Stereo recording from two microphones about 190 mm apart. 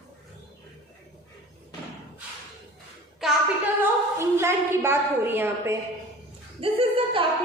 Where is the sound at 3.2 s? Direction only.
Centre (ahead or behind).